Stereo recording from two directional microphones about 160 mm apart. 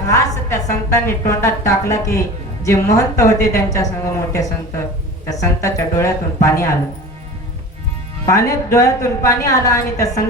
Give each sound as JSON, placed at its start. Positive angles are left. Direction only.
{"t": 0.1, "sound": "a woman's voice", "side_deg": 20}
{"t": 8.3, "sound": "a woman's voice", "side_deg": 20}